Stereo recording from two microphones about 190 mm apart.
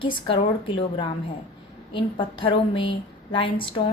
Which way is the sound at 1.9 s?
25° left (ahead or behind).